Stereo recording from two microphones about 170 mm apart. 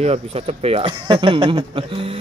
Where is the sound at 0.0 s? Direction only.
35° right (ahead or behind).